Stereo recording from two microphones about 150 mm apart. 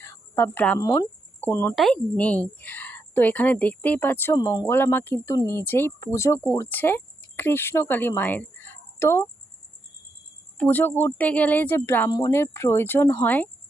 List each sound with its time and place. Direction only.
0.0 s cricket: 15° left (ahead or behind)
0.8 s speech: 20° left (ahead or behind)
1.7 s speech: 5° left (ahead or behind)
4.4 s speech: 25° left (ahead or behind)
4.6 s speech: 15° left (ahead or behind)
10.6 s speech: 10° left (ahead or behind)